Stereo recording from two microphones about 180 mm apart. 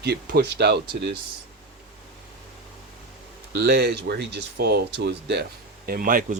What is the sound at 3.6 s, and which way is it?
Speech, 60° right (ahead or behind).